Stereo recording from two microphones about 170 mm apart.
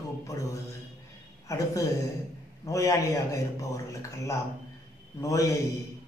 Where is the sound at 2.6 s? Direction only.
20° left (ahead or behind).